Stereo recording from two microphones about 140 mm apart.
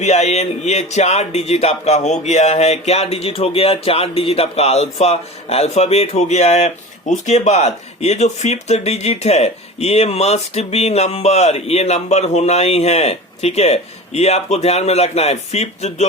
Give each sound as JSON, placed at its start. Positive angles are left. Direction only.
{"t": 0.0, "sound": "speech", "side_deg": 50}